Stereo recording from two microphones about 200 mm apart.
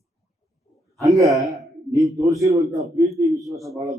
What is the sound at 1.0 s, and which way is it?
A man's voice, 15° right (ahead or behind).